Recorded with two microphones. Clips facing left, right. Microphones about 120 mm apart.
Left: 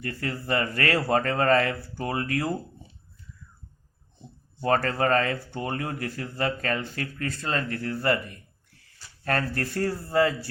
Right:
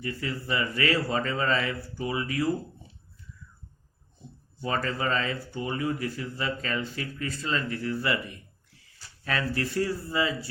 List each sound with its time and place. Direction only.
0.0 s speech: 55° left (ahead or behind)
4.6 s speech: 55° left (ahead or behind)